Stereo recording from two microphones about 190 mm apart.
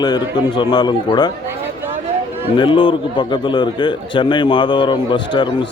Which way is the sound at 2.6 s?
25° left (ahead or behind).